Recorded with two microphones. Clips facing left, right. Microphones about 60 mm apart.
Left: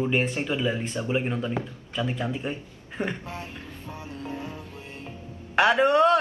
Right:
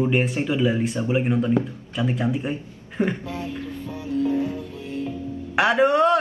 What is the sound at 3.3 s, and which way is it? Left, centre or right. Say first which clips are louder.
Music: right 7 dB; left.